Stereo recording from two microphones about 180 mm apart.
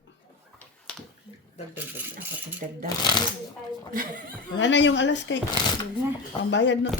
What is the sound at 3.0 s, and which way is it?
Speech, 25° left (ahead or behind).